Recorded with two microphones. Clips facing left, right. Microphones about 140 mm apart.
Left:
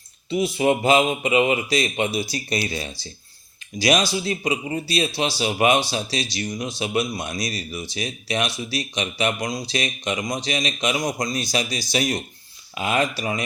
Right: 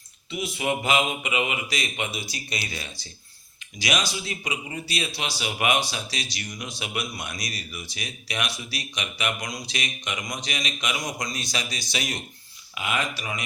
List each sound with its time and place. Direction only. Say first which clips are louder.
0.3 s a man's voice: left 8 dB; 35° left (ahead or behind)